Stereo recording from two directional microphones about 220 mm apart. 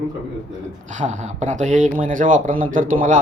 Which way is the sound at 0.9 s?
35° right (ahead or behind).